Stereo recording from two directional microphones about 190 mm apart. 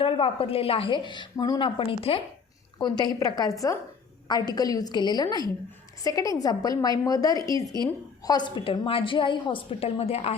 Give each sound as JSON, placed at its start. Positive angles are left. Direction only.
{"t": 0.0, "sound": "a woman's voice", "side_deg": 30}